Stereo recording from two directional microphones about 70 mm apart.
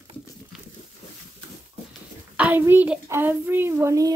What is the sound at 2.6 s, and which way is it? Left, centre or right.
Child singing, right.